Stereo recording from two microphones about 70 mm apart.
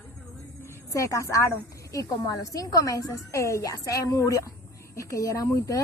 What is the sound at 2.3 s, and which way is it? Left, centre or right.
A woman's voice, left.